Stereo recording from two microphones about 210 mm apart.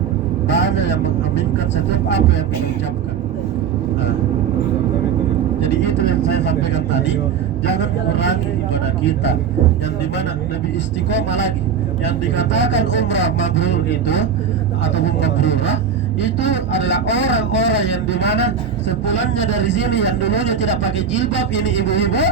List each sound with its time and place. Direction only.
0.5 s vehicle: 55° left (ahead or behind)
5.7 s speech: 50° left (ahead or behind)
11.1 s speech: 60° left (ahead or behind)